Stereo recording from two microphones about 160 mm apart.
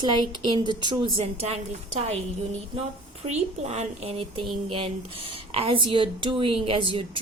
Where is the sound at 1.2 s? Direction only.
40° right (ahead or behind).